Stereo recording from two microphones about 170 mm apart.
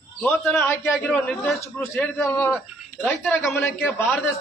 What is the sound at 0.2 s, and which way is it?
A man's voice, 10° left (ahead or behind).